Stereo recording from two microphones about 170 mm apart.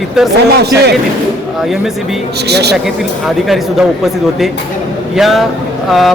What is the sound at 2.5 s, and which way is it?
Speech, 75° right (ahead or behind).